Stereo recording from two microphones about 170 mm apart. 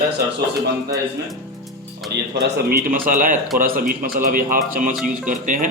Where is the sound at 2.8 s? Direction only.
55° right (ahead or behind).